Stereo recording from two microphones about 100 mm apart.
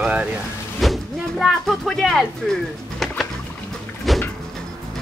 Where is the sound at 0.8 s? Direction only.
Centre (ahead or behind).